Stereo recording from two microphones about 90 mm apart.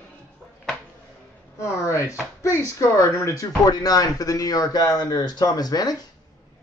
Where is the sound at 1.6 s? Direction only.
30° left (ahead or behind).